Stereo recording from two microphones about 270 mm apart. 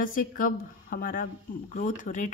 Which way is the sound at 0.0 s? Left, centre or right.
Left.